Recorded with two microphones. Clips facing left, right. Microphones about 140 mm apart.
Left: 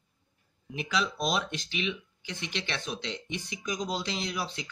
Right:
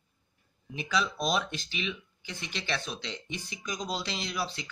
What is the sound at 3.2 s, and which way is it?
Speech, 20° left (ahead or behind).